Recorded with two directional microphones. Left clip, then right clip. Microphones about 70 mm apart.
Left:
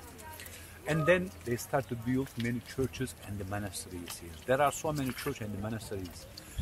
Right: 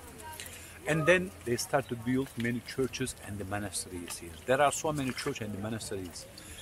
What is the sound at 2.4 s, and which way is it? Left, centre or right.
Speech, centre.